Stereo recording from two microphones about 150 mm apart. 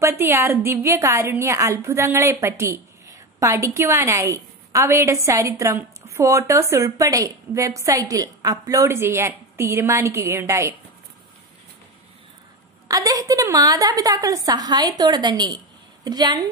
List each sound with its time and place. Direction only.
0.0 s a woman's voice: 15° right (ahead or behind)
12.8 s a woman's voice: 25° right (ahead or behind)